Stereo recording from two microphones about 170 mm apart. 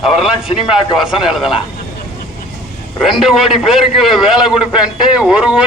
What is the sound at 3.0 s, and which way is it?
A man's voice, centre (ahead or behind).